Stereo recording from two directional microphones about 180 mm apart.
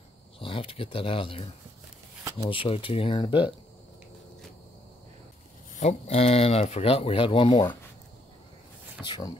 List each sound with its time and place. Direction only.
0.4 s speech: 30° left (ahead or behind)
5.8 s speech: 35° left (ahead or behind)
9.0 s speech: 25° left (ahead or behind)